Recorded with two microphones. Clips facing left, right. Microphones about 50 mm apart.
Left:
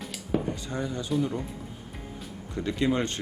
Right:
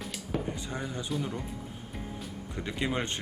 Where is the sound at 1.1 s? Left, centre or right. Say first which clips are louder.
Left 7 dB; centre.